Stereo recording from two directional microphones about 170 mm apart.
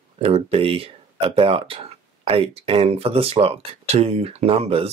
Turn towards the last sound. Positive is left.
turn(degrees=-35)  # may be behind; listen again after turning